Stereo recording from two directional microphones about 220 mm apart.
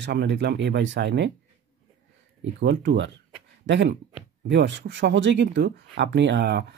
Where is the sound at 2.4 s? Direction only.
55° right (ahead or behind).